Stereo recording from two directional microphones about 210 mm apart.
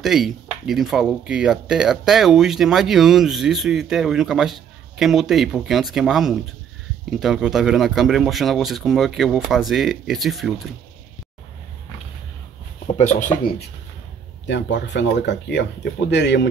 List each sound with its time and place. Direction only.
0.0 s speech: centre (ahead or behind)
12.8 s speech: 30° left (ahead or behind)
14.5 s speech: 55° left (ahead or behind)